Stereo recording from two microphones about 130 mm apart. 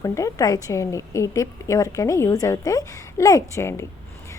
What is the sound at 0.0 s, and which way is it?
A woman's voice, 25° left (ahead or behind).